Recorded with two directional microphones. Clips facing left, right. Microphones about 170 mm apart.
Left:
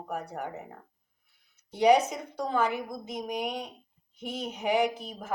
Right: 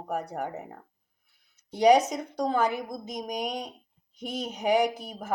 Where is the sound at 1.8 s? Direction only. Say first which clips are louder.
Right 2 dB; 40° right (ahead or behind).